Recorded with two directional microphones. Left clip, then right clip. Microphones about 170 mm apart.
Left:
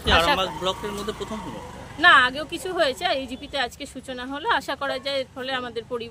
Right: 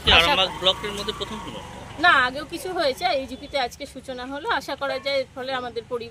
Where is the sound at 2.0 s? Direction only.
5° left (ahead or behind).